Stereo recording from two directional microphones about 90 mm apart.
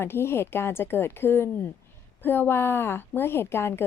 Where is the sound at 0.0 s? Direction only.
25° left (ahead or behind).